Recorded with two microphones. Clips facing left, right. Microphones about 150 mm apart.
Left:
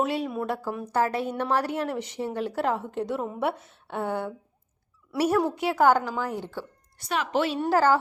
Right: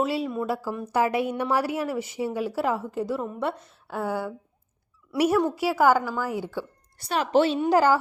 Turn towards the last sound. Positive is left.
turn(degrees=-15)  # may be behind; listen again after turning